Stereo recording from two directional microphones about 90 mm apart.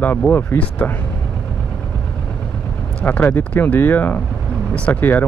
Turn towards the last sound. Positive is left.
turn(degrees=20)  # may be behind; listen again after turning